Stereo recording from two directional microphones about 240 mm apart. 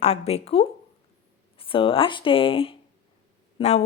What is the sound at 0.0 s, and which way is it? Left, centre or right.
Speech, left.